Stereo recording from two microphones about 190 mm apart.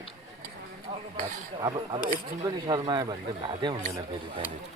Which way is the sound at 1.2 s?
40° right (ahead or behind).